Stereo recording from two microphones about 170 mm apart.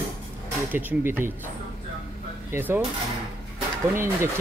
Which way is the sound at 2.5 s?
15° right (ahead or behind).